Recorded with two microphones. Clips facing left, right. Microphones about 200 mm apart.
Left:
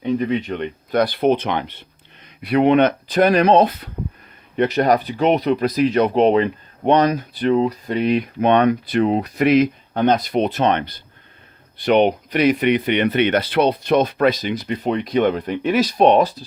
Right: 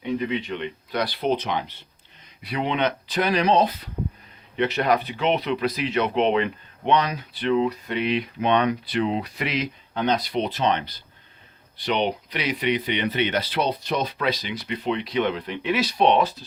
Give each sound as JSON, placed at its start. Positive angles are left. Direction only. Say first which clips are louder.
{"t": 0.0, "sound": "speech", "louder": "left 6 dB", "side_deg": 45}
{"t": 4.5, "sound": "speech", "louder": "left 5 dB", "side_deg": 45}